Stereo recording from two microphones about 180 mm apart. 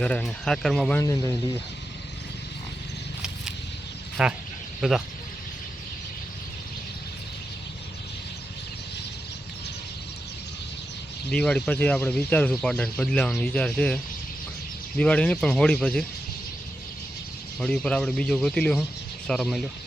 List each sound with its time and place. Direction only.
0.0 s speech: 5° left (ahead or behind)
0.9 s speech: 20° left (ahead or behind)
4.2 s speech: 5° right (ahead or behind)
11.3 s speech: 5° left (ahead or behind)
17.6 s speech: 5° left (ahead or behind)